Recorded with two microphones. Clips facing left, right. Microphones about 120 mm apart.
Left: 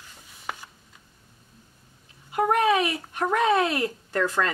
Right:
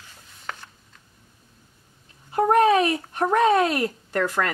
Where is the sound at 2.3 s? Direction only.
35° right (ahead or behind).